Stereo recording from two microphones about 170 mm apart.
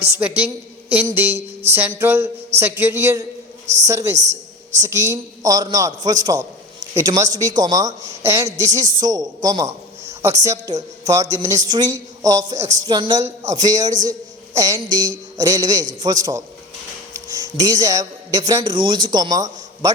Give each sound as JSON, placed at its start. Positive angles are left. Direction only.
{"t": 0.2, "sound": "a woman's voice", "side_deg": -10}
{"t": 1.1, "sound": "music", "side_deg": -10}
{"t": 3.8, "sound": "a woman's voice", "side_deg": -20}
{"t": 4.2, "sound": "a sound", "side_deg": -90}
{"t": 4.8, "sound": "a woman's voice", "side_deg": -20}